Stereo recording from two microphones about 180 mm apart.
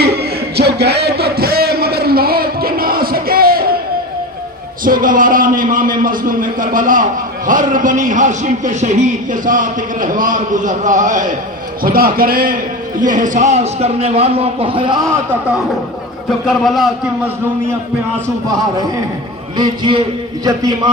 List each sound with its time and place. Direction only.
0.0 s a sound: 65° right (ahead or behind)
4.8 s a man's voice: 50° right (ahead or behind)
11.8 s a man's voice: 55° right (ahead or behind); by 15.0 s 25° right (ahead or behind)
15.3 s a man's voice: 5° right (ahead or behind)
19.5 s speech: 25° right (ahead or behind)